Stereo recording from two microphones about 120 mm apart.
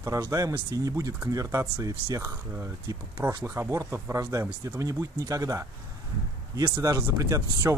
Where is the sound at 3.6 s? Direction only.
20° right (ahead or behind).